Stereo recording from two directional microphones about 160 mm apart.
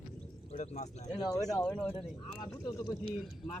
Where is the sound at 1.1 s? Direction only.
25° left (ahead or behind).